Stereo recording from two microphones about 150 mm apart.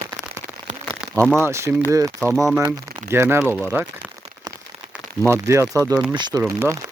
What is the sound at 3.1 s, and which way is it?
Speech, 15° right (ahead or behind).